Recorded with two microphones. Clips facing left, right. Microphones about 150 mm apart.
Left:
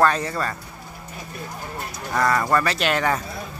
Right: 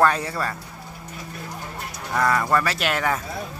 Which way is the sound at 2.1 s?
5° right (ahead or behind).